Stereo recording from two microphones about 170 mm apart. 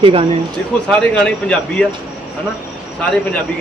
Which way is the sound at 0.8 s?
5° left (ahead or behind).